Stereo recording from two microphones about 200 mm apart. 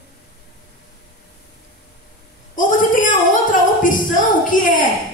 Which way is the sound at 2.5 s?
40° left (ahead or behind).